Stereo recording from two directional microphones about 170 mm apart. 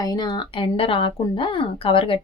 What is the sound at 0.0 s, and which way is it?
Speech, 25° left (ahead or behind).